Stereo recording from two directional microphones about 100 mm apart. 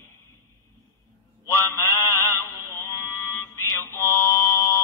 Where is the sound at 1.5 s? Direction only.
30° left (ahead or behind).